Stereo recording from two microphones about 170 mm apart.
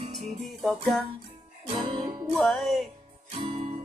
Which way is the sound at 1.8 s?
30° right (ahead or behind).